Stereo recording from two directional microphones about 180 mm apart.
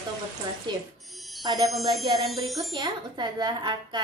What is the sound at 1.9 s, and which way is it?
Speech, 25° right (ahead or behind).